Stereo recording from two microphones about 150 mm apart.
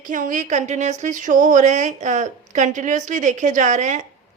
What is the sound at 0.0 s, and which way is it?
A woman's voice, 60° right (ahead or behind).